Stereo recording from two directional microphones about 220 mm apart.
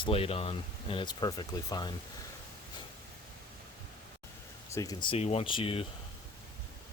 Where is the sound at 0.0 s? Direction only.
25° left (ahead or behind).